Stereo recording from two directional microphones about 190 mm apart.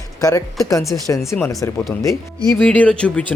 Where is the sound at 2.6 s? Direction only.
5° left (ahead or behind).